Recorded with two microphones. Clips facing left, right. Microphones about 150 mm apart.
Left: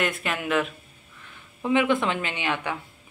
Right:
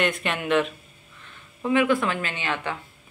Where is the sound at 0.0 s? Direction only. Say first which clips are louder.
Right 2 dB; 5° left (ahead or behind).